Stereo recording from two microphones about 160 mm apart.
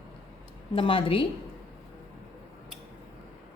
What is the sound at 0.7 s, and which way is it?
Speech, 35° left (ahead or behind).